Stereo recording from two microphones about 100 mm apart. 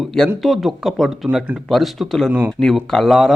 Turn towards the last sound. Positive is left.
turn(degrees=0)  # may be behind; listen again after turning